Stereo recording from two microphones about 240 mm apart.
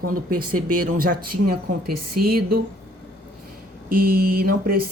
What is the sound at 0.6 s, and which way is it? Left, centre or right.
Speech, right.